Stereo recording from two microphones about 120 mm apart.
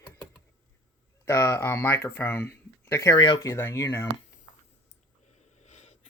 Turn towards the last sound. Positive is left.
turn(degrees=75)  # may be behind; listen again after turning